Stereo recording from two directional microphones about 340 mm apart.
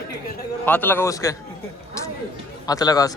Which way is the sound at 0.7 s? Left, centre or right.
Centre.